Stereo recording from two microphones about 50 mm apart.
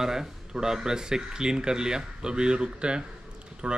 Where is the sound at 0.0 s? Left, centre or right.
Centre.